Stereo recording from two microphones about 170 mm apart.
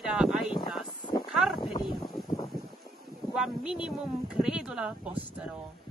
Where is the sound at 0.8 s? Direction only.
25° left (ahead or behind).